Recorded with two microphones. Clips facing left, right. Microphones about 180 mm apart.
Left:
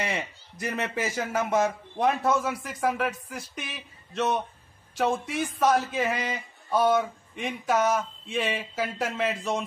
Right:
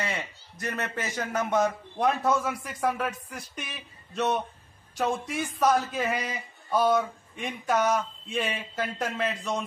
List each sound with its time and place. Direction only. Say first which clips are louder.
0.0 s speech: left 2 dB; 15° left (ahead or behind)